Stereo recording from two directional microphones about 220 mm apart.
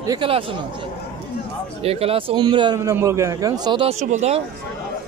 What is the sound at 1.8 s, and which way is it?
A man's voice, 25° right (ahead or behind).